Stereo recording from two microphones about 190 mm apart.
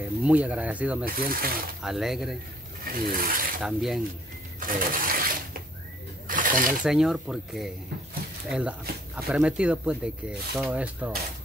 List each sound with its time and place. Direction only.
0.0 s speech: 5° right (ahead or behind)
1.0 s speech: 50° right (ahead or behind)
1.8 s speech: centre (ahead or behind)
2.8 s speech: 50° right (ahead or behind)
3.6 s speech: centre (ahead or behind)
4.6 s a sound: 50° right (ahead or behind)
6.8 s speech: 5° right (ahead or behind)